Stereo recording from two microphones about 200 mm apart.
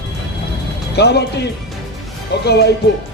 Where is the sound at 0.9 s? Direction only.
55° left (ahead or behind).